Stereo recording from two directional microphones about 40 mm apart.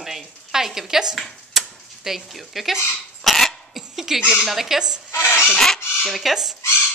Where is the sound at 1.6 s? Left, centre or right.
Centre.